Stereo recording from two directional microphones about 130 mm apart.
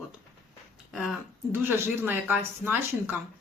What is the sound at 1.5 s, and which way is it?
Speech, 15° right (ahead or behind).